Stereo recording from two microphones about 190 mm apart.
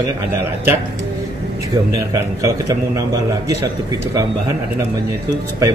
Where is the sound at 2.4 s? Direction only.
15° right (ahead or behind).